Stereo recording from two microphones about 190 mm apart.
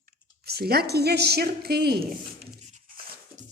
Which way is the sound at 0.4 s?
55° right (ahead or behind).